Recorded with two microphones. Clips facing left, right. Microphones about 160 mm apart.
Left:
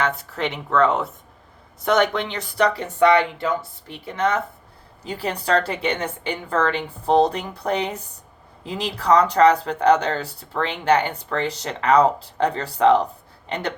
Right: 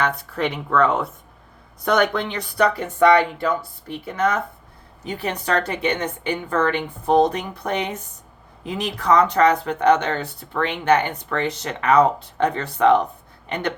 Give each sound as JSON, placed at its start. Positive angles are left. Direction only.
{"t": 0.0, "sound": "a woman's voice", "side_deg": 25}